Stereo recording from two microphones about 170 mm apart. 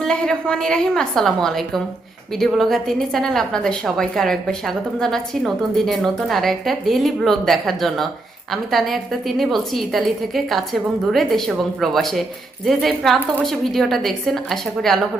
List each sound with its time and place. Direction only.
0.0 s a woman's voice: 5° left (ahead or behind)